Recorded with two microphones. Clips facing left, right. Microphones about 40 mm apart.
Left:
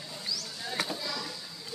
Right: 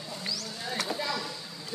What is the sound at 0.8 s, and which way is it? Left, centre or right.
Chop, centre.